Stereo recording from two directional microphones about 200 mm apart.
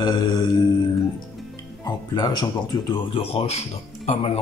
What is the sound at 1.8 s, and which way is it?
Speech, 20° left (ahead or behind).